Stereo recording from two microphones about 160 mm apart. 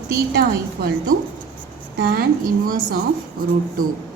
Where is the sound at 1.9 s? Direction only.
75° right (ahead or behind).